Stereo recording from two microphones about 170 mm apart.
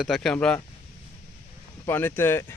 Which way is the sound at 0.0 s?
Centre (ahead or behind).